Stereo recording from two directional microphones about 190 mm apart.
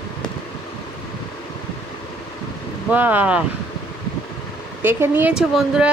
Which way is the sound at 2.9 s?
10° right (ahead or behind).